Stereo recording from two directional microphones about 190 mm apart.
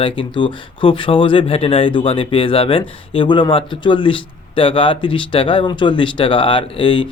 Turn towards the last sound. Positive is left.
turn(degrees=25)  # may be behind; listen again after turning